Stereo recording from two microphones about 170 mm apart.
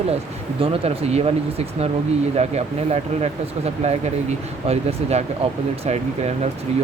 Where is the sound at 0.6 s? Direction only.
35° right (ahead or behind).